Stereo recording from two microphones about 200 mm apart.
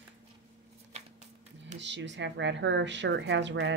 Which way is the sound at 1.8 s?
65° right (ahead or behind).